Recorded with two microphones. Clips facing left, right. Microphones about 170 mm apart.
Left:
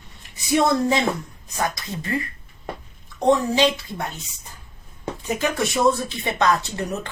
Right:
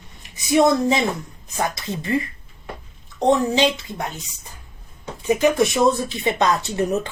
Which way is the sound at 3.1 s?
20° right (ahead or behind).